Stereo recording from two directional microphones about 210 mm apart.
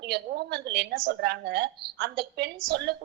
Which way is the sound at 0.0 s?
50° right (ahead or behind).